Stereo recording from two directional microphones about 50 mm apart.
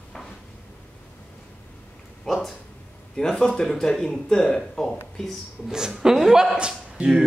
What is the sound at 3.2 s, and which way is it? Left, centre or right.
Speech, centre.